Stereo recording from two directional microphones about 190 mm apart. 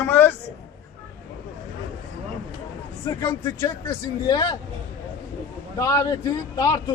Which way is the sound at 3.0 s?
15° left (ahead or behind).